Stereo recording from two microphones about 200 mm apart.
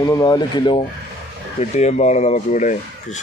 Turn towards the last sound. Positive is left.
turn(degrees=35)  # may be behind; listen again after turning